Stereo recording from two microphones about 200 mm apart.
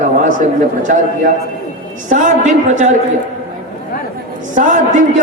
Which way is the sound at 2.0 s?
40° right (ahead or behind).